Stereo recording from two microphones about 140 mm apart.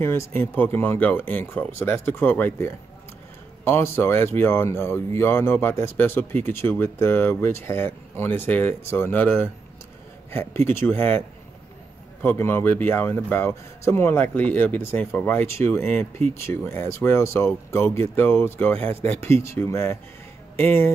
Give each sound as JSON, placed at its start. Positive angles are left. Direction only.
{"t": 0.0, "sound": "speech", "side_deg": 15}